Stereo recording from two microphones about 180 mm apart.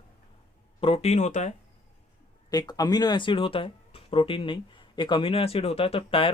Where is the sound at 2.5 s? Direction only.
20° left (ahead or behind).